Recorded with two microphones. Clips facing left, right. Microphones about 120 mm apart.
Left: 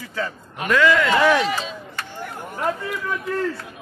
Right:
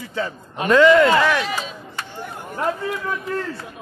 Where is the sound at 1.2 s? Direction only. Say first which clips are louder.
Left 2 dB; 15° left (ahead or behind).